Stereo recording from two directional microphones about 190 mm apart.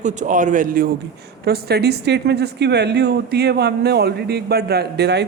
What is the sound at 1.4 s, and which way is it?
A woman's voice, 55° right (ahead or behind).